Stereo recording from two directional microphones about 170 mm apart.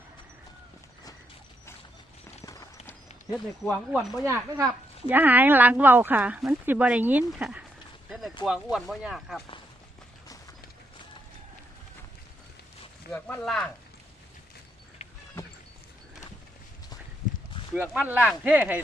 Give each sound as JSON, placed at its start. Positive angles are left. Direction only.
{"t": 2.4, "sound": "run", "side_deg": 20}
{"t": 3.3, "sound": "speech", "side_deg": 0}
{"t": 4.2, "sound": "speech", "side_deg": -15}
{"t": 13.1, "sound": "speech", "side_deg": 10}
{"t": 17.9, "sound": "speech", "side_deg": -10}